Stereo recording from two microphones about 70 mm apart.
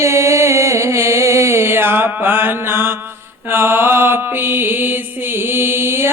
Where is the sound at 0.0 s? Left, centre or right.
Right.